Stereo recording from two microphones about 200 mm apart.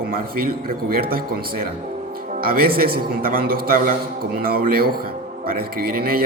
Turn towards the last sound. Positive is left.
turn(degrees=-50)  # may be behind; listen again after turning